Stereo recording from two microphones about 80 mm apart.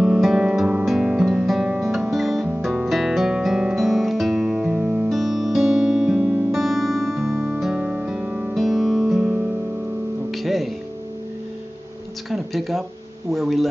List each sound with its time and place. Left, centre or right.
0.0 s music: centre
5.1 s music: centre
7.7 s music: centre
8.5 s music: centre
10.3 s music: centre
12.3 s a sound: centre
13.3 s tuning fork: centre